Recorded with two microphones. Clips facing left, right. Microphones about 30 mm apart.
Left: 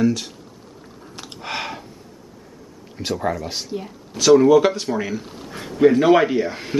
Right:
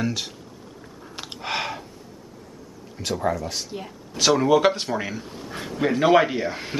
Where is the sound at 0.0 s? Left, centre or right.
Centre.